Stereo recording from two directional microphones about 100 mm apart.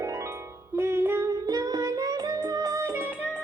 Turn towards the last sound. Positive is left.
turn(degrees=-30)  # may be behind; listen again after turning